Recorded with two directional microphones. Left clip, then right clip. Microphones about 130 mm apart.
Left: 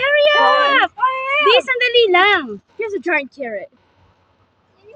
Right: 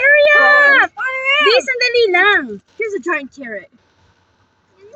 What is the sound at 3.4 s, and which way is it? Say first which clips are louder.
Speech: left 3 dB; 15° left (ahead or behind).